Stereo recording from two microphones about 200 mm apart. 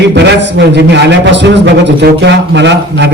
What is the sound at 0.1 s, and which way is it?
Speech, 60° right (ahead or behind).